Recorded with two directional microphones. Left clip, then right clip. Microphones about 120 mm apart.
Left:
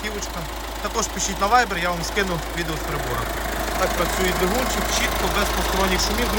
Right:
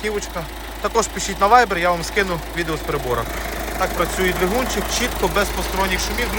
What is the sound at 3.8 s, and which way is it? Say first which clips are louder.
Speech: right 2 dB; 5° left (ahead or behind).